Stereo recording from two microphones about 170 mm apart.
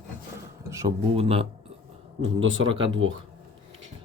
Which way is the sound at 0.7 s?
20° right (ahead or behind).